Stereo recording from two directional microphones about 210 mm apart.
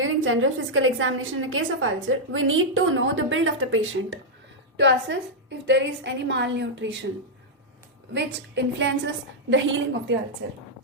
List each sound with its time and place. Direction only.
0.0 s a woman's voice: 70° right (ahead or behind)
8.1 s a woman's voice: 60° right (ahead or behind)